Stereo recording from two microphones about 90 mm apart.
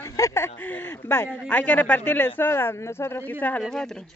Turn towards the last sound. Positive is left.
turn(degrees=5)  # may be behind; listen again after turning